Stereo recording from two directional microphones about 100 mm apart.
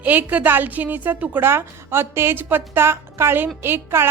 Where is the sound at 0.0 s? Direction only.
15° right (ahead or behind).